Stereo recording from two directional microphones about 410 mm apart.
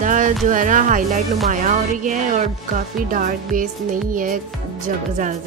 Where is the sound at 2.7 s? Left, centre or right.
Centre.